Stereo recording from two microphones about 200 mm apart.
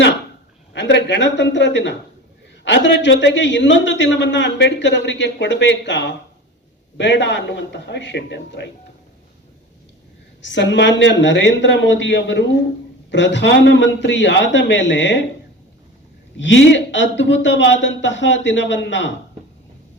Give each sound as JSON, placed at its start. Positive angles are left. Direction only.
{"t": 0.7, "sound": "a man's voice", "side_deg": 60}
{"t": 10.4, "sound": "a man's voice", "side_deg": 60}
{"t": 16.4, "sound": "a man's voice", "side_deg": 65}